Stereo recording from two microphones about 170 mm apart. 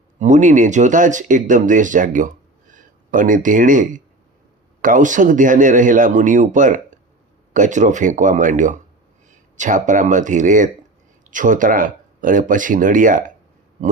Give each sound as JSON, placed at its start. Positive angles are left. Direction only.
{"t": 0.2, "sound": "speech", "side_deg": -45}